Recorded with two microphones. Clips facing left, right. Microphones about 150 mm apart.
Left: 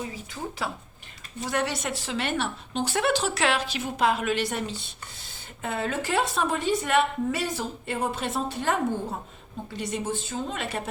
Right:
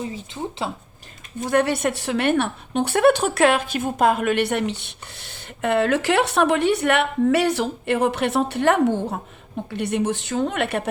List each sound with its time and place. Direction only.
0.0 s a woman's voice: 25° right (ahead or behind)
1.4 s a woman's voice: 50° right (ahead or behind)